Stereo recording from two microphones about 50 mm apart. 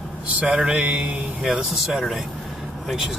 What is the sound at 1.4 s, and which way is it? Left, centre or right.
Speech, centre.